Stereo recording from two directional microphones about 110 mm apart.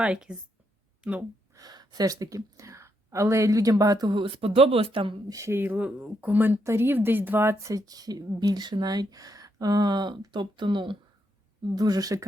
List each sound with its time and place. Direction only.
0.0 s speech: 10° right (ahead or behind)
1.5 s speech: 40° right (ahead or behind)
5.3 s speech: 25° right (ahead or behind); by 10.9 s 45° right (ahead or behind)
11.7 s speech: 35° right (ahead or behind)